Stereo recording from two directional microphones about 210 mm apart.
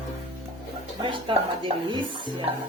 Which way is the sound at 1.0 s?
25° right (ahead or behind).